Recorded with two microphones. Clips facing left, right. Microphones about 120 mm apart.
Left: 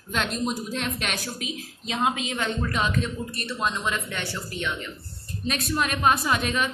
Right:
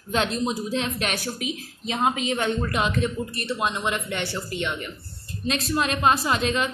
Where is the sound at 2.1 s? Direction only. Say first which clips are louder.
Right 3 dB; 15° right (ahead or behind).